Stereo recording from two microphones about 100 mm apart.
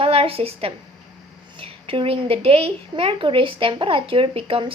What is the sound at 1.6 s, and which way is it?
A woman's voice, 65° right (ahead or behind).